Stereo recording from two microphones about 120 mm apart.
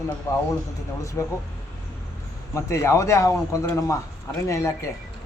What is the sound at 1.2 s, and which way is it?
Speech, 20° left (ahead or behind).